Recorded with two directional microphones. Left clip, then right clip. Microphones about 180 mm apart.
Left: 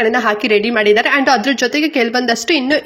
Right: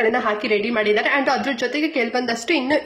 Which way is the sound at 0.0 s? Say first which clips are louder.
Left 5 dB; 25° left (ahead or behind).